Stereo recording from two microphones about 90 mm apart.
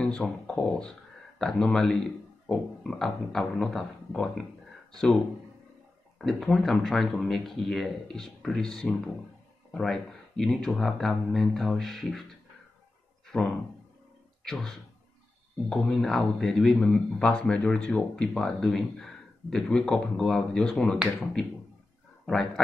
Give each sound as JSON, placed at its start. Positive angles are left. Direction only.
{"t": 0.0, "sound": "a man's voice", "side_deg": 10}
{"t": 13.3, "sound": "a man's voice", "side_deg": 10}